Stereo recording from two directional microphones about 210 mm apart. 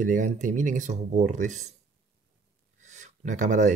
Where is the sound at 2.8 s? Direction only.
35° right (ahead or behind).